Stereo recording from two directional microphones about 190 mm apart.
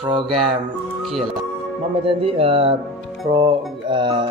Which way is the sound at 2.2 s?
30° right (ahead or behind).